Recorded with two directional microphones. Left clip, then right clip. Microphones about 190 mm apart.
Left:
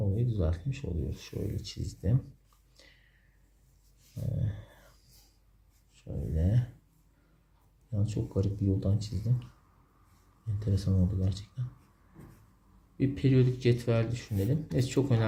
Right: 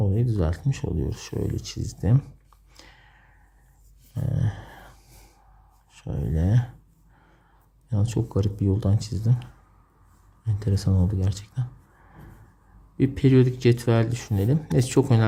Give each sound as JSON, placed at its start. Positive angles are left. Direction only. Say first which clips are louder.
{"t": 0.2, "sound": "speech", "louder": "right 7 dB", "side_deg": -40}
{"t": 2.7, "sound": "a sound", "louder": "right 8 dB", "side_deg": -40}
{"t": 5.9, "sound": "speech", "louder": "right 8 dB", "side_deg": -40}
{"t": 7.9, "sound": "speech", "louder": "right 8 dB", "side_deg": -40}
{"t": 13.0, "sound": "speech", "louder": "right 8 dB", "side_deg": -40}